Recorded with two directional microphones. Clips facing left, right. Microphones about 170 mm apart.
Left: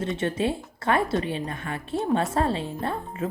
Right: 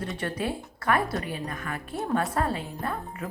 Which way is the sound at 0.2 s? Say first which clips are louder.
Left 3 dB; 25° left (ahead or behind).